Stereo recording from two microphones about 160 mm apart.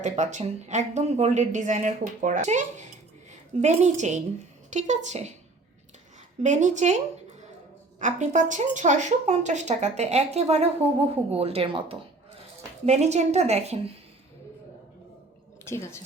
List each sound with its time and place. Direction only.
0.0 s speech: 50° right (ahead or behind)
6.4 s speech: 50° right (ahead or behind)
7.9 s speech: 50° right (ahead or behind)
12.8 s speech: 45° right (ahead or behind)
15.6 s speech: 15° left (ahead or behind)